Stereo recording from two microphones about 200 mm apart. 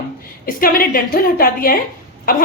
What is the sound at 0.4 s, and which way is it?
A woman's voice, 45° left (ahead or behind).